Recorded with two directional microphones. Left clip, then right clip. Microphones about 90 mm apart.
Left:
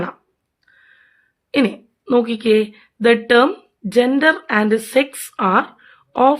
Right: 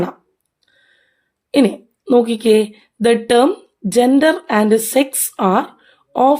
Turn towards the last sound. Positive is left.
turn(degrees=-35)  # may be behind; listen again after turning